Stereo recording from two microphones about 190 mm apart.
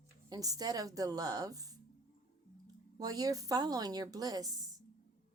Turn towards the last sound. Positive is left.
turn(degrees=-20)  # may be behind; listen again after turning